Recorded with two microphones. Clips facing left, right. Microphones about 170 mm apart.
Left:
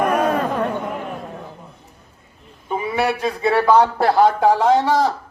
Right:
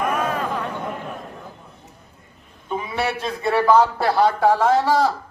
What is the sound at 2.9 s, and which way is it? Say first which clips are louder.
A man's voice: left 5 dB; 10° left (ahead or behind).